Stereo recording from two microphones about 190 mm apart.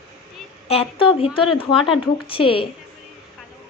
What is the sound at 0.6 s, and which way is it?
A woman's voice, 30° left (ahead or behind).